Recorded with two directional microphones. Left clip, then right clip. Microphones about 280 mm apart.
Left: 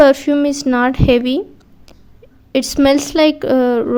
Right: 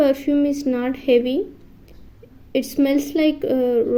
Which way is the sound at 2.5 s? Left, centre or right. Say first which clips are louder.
Left 7 dB; left.